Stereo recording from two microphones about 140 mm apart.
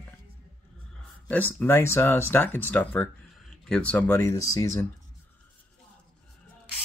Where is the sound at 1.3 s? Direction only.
15° left (ahead or behind).